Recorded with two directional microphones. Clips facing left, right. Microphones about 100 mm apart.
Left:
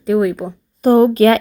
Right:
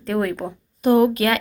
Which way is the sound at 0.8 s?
35° left (ahead or behind).